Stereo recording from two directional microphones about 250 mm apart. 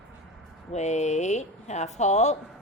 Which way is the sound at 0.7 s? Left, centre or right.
Left.